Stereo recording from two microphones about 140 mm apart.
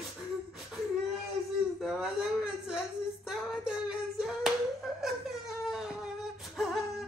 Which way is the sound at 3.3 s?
5° right (ahead or behind).